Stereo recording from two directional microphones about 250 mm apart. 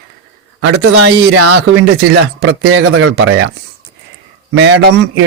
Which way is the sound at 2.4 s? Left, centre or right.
Right.